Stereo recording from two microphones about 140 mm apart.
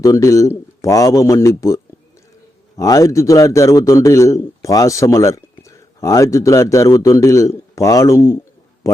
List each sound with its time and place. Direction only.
0.0 s a man's voice: 25° left (ahead or behind)